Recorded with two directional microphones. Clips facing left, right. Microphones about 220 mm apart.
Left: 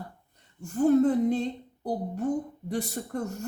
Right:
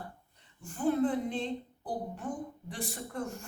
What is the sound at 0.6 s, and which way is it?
Speech, 40° left (ahead or behind).